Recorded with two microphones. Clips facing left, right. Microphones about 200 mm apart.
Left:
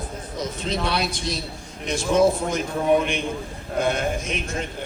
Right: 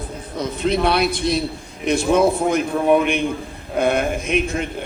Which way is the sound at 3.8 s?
60° right (ahead or behind).